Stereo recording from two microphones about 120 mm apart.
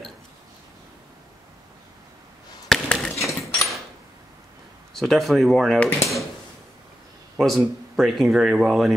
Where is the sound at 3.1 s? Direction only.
25° left (ahead or behind).